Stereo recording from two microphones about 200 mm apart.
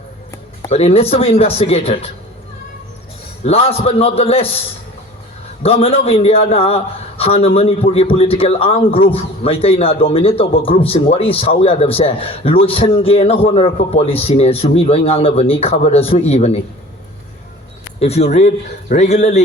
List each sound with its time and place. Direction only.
0.7 s a man's voice: 30° left (ahead or behind)
3.4 s a man's voice: 30° left (ahead or behind)
5.6 s a man's voice: 30° left (ahead or behind)
18.0 s a man's voice: 30° left (ahead or behind)